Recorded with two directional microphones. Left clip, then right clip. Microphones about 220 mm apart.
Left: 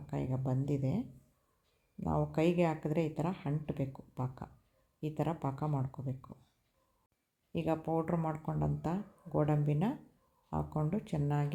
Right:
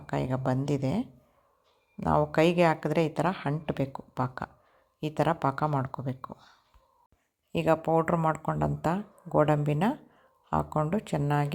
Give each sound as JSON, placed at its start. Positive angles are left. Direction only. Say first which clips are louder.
{"t": 0.1, "sound": "speech", "louder": "right 9 dB", "side_deg": -15}
{"t": 7.5, "sound": "speech", "louder": "right 10 dB", "side_deg": -15}